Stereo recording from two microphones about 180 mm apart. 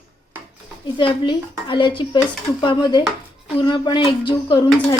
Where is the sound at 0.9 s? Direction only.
25° left (ahead or behind).